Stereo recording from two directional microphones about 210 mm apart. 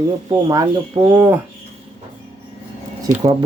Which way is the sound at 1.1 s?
10° right (ahead or behind).